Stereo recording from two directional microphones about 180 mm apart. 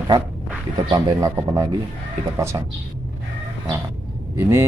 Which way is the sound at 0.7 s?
20° right (ahead or behind).